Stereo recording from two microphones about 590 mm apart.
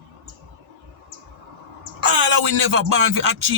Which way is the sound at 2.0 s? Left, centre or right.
Right.